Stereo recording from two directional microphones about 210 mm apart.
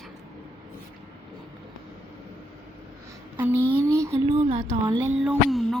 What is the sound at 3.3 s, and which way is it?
Speech, 10° right (ahead or behind).